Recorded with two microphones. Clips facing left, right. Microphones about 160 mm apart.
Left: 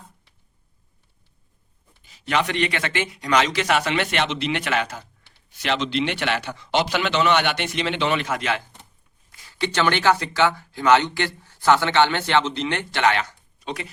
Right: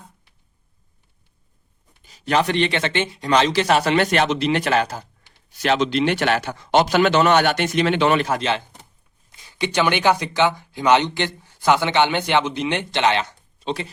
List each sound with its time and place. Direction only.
2.0 s a man's voice: 40° right (ahead or behind)
9.3 s speech: 15° right (ahead or behind)